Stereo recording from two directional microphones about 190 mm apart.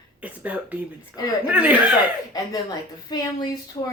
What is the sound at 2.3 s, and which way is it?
Speech, 20° left (ahead or behind).